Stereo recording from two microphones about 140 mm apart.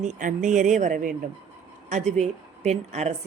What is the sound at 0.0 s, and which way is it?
Speech, 65° right (ahead or behind).